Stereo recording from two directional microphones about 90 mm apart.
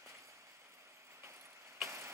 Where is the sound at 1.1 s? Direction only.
30° right (ahead or behind).